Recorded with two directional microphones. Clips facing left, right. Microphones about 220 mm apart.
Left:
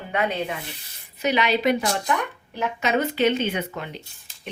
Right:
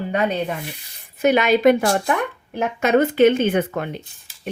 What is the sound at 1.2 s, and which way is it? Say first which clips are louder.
Speech: right 6 dB; 50° right (ahead or behind).